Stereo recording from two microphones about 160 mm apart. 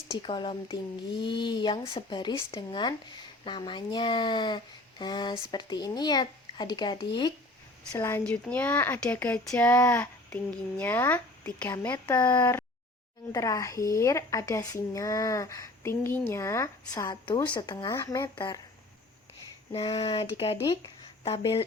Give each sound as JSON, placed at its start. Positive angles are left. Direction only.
{"t": 0.1, "sound": "speech", "side_deg": 30}
{"t": 7.9, "sound": "speech", "side_deg": 15}
{"t": 12.2, "sound": "speech", "side_deg": 25}
{"t": 19.7, "sound": "speech", "side_deg": 35}